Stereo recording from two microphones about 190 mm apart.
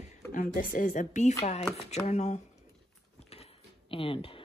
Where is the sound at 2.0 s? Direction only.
35° left (ahead or behind).